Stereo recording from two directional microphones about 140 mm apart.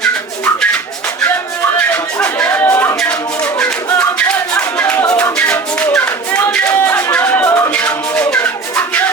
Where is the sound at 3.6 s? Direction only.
10° left (ahead or behind).